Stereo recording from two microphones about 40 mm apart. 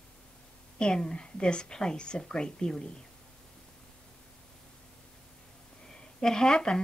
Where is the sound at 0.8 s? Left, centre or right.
Left.